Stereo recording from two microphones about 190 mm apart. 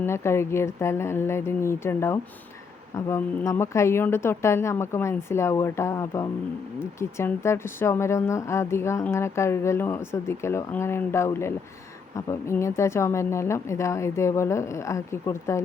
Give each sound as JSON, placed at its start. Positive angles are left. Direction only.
{"t": 0.0, "sound": "a woman's voice", "side_deg": 15}